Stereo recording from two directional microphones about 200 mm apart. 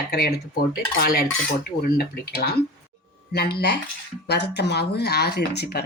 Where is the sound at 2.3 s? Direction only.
50° left (ahead or behind).